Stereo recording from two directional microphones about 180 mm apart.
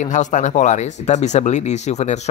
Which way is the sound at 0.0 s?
40° left (ahead or behind).